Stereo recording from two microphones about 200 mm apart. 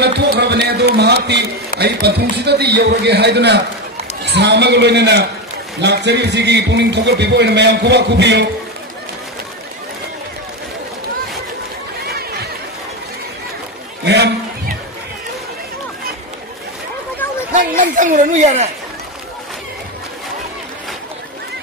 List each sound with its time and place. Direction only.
0.0 s a man's voice: 55° right (ahead or behind)
14.0 s a man's voice: 55° right (ahead or behind)
17.7 s speech: 40° right (ahead or behind)